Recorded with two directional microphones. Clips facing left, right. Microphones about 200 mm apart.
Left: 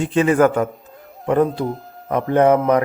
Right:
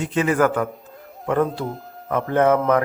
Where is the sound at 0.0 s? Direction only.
30° left (ahead or behind).